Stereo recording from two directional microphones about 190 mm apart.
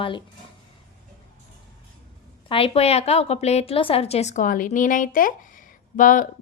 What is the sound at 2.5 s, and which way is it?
A woman's voice, 30° left (ahead or behind).